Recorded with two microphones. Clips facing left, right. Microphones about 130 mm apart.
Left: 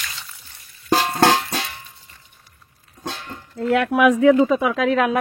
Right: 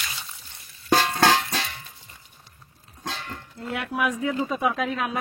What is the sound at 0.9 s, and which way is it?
Music, 35° left (ahead or behind).